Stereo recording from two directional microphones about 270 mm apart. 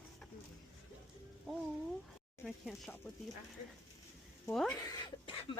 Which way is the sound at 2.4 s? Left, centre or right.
Centre.